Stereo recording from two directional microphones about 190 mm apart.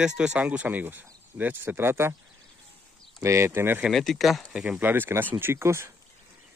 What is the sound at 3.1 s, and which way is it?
Speech, 15° right (ahead or behind).